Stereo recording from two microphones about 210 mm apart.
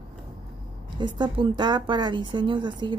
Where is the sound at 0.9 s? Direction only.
20° right (ahead or behind).